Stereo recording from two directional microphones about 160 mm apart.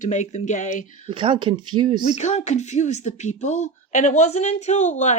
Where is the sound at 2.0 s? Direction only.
45° left (ahead or behind).